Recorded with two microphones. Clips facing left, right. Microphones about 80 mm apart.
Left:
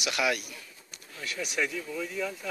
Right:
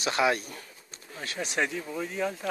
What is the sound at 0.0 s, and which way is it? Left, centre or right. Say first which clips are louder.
Speech: right 3 dB; right.